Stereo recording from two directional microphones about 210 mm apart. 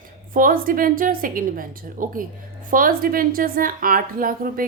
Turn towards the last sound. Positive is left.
turn(degrees=-40)  # may be behind; listen again after turning